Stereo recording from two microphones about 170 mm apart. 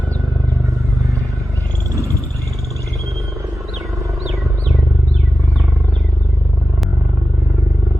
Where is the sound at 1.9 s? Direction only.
20° right (ahead or behind).